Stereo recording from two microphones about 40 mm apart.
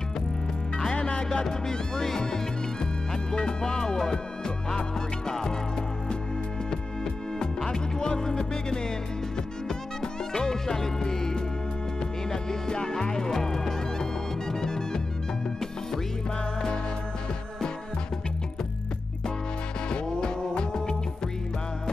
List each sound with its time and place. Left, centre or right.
0.9 s music: left
7.3 s music: centre
10.3 s music: centre
19.9 s music: left